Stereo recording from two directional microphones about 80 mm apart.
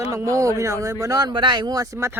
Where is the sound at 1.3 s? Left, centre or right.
Right.